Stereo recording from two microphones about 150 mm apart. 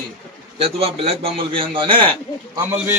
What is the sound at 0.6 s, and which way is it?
Speech, 40° right (ahead or behind).